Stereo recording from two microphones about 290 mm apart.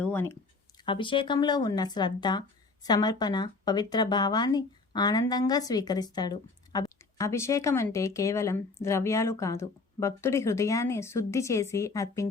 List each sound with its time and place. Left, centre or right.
0.0 s speech: centre